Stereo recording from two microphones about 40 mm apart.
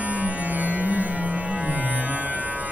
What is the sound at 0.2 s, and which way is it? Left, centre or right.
Music, right.